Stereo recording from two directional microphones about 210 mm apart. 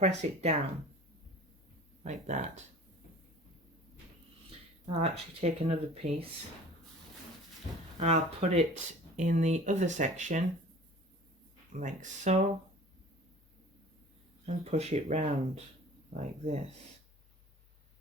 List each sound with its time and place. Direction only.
0.0 s speech: 30° right (ahead or behind)
2.2 s speech: 35° right (ahead or behind)
5.1 s speech: 30° right (ahead or behind)
7.9 s speech: 30° right (ahead or behind)
11.7 s speech: 35° right (ahead or behind)
14.4 s speech: 30° right (ahead or behind)